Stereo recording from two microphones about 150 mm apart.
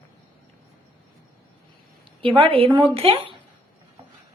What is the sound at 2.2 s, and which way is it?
A woman's voice, 35° right (ahead or behind).